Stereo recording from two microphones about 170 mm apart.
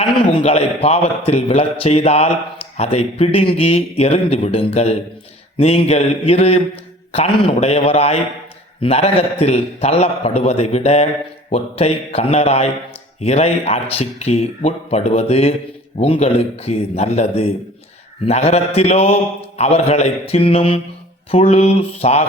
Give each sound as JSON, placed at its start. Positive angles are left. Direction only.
{"t": 0.4, "sound": "a man's voice", "side_deg": 35}